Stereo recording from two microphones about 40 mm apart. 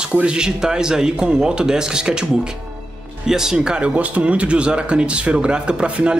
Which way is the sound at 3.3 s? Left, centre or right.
Centre.